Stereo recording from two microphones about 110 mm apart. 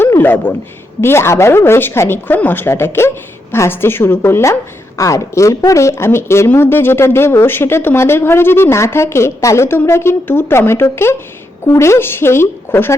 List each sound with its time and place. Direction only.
0.0 s speech: 20° left (ahead or behind)